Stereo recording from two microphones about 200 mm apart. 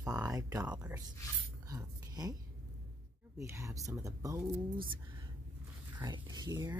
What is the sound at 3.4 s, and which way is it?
Speech, 15° right (ahead or behind).